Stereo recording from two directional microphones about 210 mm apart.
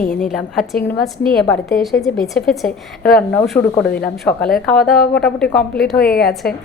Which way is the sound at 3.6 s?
20° left (ahead or behind).